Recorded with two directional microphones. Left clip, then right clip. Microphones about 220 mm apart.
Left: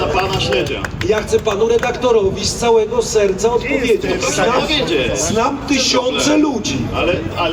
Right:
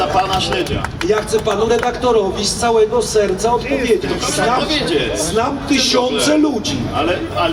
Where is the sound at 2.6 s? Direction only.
50° left (ahead or behind).